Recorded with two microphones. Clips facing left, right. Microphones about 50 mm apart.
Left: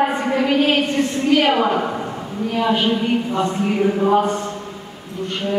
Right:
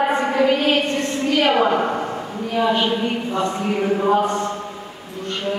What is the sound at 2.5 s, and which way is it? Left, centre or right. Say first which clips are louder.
Speech: even; centre.